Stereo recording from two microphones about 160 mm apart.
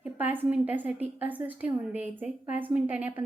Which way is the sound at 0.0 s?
10° right (ahead or behind).